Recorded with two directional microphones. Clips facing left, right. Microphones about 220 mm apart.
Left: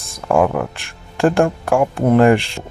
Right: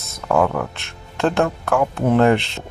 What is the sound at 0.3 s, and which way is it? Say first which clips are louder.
Speech: left 3 dB; 15° left (ahead or behind).